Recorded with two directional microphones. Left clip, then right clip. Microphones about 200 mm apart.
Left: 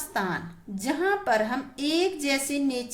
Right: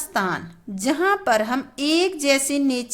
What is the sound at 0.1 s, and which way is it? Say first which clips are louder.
A woman's voice: right 6 dB; 35° right (ahead or behind).